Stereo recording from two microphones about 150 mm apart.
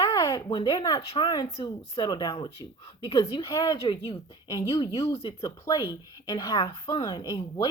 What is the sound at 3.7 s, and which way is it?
Speech, 40° left (ahead or behind).